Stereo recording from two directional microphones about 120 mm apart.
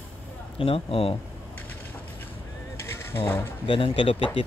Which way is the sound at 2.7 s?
20° left (ahead or behind).